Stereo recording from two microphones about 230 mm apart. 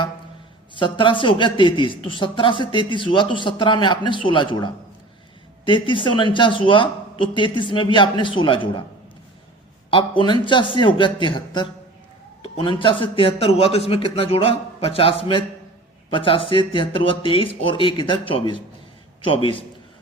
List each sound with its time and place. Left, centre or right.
0.7 s a woman's voice: left
9.9 s a woman's voice: left